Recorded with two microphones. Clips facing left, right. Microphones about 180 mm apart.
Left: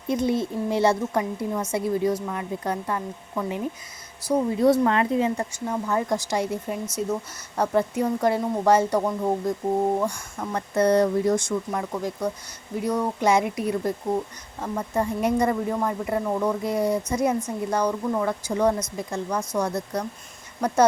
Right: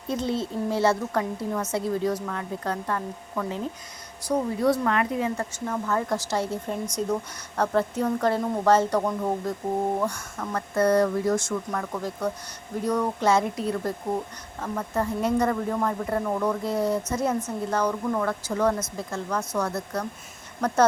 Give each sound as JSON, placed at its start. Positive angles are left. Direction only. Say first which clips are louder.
{"t": 0.1, "sound": "speech", "louder": "left 4 dB", "side_deg": 15}
{"t": 4.6, "sound": "speech", "louder": "left 5 dB", "side_deg": 25}
{"t": 5.4, "sound": "speech", "louder": "left 2 dB", "side_deg": 15}